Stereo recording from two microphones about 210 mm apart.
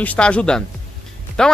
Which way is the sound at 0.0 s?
5° left (ahead or behind).